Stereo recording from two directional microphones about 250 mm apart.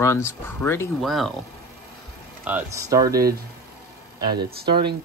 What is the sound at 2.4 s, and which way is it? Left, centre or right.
Speech, centre.